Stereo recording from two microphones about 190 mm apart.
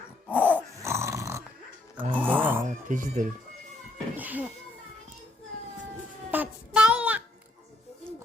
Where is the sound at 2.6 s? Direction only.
45° right (ahead or behind).